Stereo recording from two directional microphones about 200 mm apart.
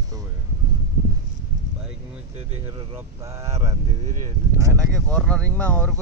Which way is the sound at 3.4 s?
30° right (ahead or behind).